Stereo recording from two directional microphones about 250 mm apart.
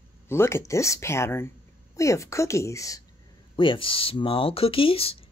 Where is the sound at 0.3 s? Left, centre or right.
Centre.